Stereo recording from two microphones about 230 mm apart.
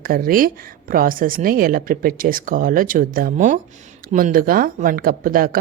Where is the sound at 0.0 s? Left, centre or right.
Right.